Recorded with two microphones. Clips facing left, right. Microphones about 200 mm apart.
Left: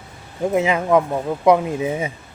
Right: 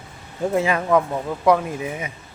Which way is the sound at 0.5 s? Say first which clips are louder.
Left 2 dB; 15° left (ahead or behind).